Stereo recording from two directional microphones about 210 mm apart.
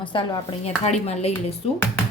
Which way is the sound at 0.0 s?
25° left (ahead or behind).